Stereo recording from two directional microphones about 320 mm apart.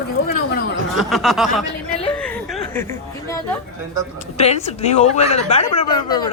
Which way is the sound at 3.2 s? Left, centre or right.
Centre.